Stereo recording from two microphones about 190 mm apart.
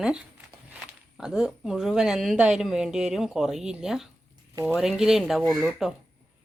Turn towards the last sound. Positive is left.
turn(degrees=0)  # may be behind; listen again after turning